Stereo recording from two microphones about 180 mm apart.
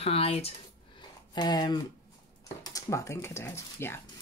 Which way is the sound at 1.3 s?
20° left (ahead or behind).